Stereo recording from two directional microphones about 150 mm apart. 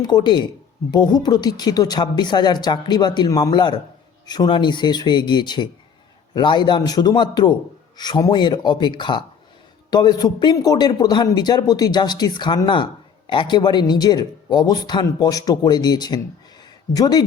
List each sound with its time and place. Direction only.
0.1 s a man's voice: 30° left (ahead or behind)